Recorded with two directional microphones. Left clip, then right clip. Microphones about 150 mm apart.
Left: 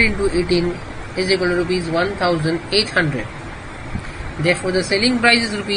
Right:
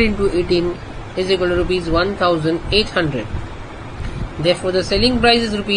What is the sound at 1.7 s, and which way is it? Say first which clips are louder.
Speech: right 2 dB; 50° right (ahead or behind).